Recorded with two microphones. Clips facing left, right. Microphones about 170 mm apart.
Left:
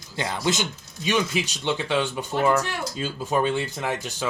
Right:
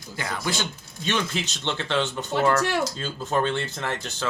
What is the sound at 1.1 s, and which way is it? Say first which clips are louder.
Speech: left 3 dB; 10° left (ahead or behind).